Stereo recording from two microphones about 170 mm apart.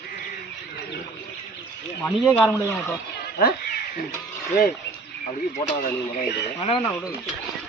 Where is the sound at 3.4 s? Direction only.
60° left (ahead or behind).